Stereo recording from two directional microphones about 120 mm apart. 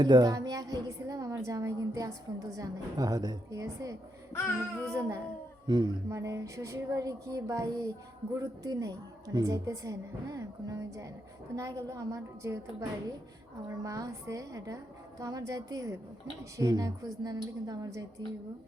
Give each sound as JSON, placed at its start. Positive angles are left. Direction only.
{"t": 0.0, "sound": "a woman's voice", "side_deg": -35}
{"t": 4.3, "sound": "babbling", "side_deg": 20}
{"t": 4.9, "sound": "a woman's voice", "side_deg": -25}
{"t": 5.6, "sound": "a woman's voice", "side_deg": -40}
{"t": 6.1, "sound": "a woman's voice", "side_deg": -25}
{"t": 13.7, "sound": "a woman's voice", "side_deg": -30}